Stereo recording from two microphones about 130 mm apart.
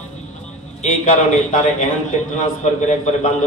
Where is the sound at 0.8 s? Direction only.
70° left (ahead or behind).